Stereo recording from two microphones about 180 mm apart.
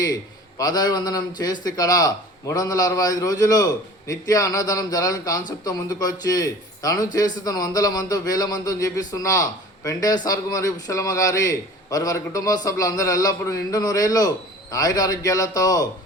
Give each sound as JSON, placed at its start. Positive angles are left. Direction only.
{"t": 0.6, "sound": "a man's voice", "side_deg": 20}